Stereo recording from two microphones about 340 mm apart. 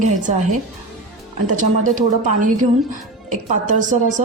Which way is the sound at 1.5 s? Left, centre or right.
Right.